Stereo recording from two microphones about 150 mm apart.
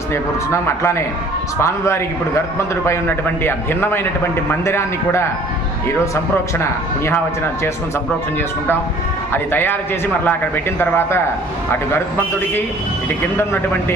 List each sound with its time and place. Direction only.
0.1 s a man's voice: 15° left (ahead or behind)
6.6 s a man's voice: 15° left (ahead or behind)
9.3 s a man's voice: 15° left (ahead or behind)